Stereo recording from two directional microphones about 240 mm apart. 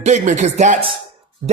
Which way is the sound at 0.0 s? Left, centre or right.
Right.